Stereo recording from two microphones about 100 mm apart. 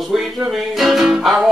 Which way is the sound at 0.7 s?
Centre (ahead or behind).